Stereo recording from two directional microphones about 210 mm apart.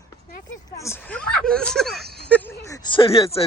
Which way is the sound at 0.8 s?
10° left (ahead or behind).